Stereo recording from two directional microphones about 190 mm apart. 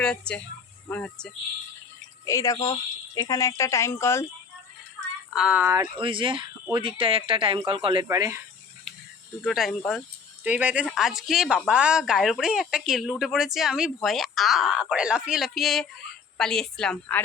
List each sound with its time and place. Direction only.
0.0 s speech: 5° left (ahead or behind)
5.3 s speech: 5° right (ahead or behind)
6.0 s speech: 25° right (ahead or behind)
8.0 s speech: 15° right (ahead or behind)
9.4 s speech: centre (ahead or behind)